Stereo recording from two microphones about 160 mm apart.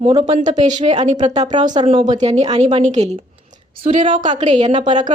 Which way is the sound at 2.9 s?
45° right (ahead or behind).